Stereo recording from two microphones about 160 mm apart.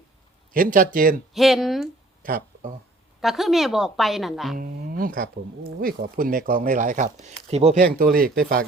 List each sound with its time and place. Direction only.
0.5 s speech: 60° right (ahead or behind)
1.3 s a woman's voice: centre (ahead or behind)
2.2 s a sound: 65° right (ahead or behind)
3.2 s a woman's voice: centre (ahead or behind)
4.5 s speech: 60° right (ahead or behind); by 7.8 s 40° right (ahead or behind)
7.8 s speech: 60° right (ahead or behind)